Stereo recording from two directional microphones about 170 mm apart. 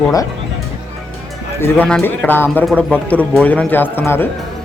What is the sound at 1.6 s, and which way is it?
Speech, 5° left (ahead or behind).